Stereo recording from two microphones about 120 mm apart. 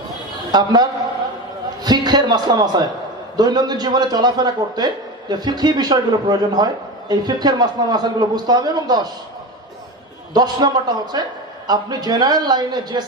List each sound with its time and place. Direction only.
0.5 s a man's voice: 35° right (ahead or behind)
10.3 s a man's voice: 35° right (ahead or behind)